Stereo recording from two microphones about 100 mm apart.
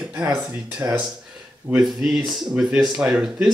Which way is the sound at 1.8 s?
Centre (ahead or behind).